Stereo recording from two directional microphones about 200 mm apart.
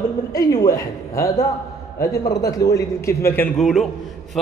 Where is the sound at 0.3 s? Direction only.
20° left (ahead or behind).